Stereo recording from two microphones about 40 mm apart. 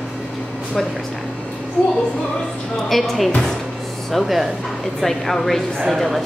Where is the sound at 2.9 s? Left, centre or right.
Centre.